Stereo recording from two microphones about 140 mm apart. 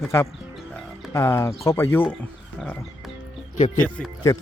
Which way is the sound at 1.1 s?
20° left (ahead or behind).